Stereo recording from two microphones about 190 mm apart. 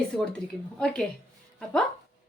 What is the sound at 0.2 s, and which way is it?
Speech, 5° left (ahead or behind).